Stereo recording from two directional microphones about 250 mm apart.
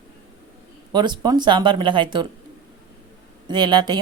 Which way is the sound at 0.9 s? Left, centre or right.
Centre.